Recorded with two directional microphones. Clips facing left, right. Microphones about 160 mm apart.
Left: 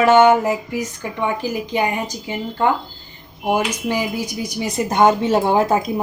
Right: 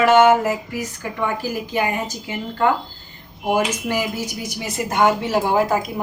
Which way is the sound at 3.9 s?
15° left (ahead or behind).